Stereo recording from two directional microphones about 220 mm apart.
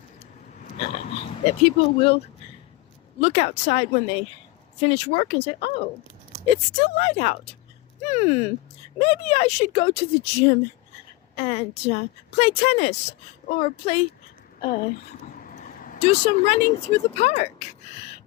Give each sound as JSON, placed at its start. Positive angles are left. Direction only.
{"t": 0.6, "sound": "speech", "side_deg": 25}